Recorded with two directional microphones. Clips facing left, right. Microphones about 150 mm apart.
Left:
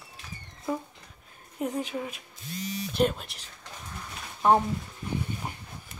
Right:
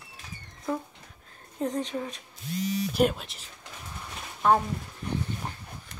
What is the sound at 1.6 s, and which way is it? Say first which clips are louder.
Speech: right 1 dB; 5° left (ahead or behind).